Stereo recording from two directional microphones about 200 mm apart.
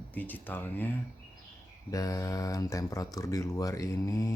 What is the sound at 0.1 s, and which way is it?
Speech, 10° left (ahead or behind).